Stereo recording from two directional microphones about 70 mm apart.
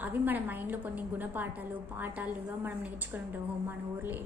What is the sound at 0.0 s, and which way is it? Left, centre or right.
A woman's voice, right.